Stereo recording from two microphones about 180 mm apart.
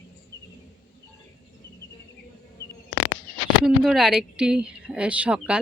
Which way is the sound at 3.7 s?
5° right (ahead or behind).